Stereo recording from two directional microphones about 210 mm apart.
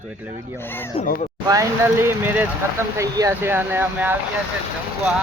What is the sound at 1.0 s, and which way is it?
Speech, 40° left (ahead or behind).